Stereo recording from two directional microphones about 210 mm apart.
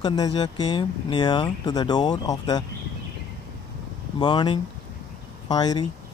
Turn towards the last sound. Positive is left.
turn(degrees=20)  # may be behind; listen again after turning